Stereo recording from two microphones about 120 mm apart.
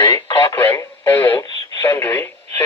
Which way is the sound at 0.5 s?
20° left (ahead or behind).